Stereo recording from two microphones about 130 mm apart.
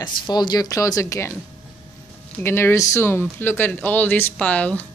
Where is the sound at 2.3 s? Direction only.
20° left (ahead or behind).